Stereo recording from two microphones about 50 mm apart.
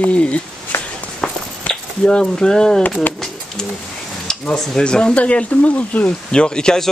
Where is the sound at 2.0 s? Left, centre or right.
Centre.